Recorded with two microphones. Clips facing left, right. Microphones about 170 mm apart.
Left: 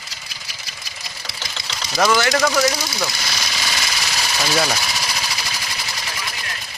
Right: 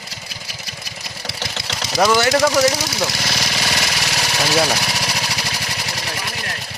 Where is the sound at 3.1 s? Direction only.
70° right (ahead or behind).